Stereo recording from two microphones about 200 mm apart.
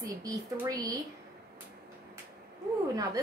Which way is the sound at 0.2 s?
15° right (ahead or behind).